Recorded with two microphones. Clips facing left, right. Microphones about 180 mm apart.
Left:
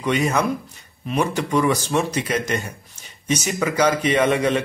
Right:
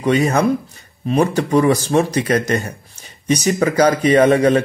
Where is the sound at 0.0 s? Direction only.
35° right (ahead or behind).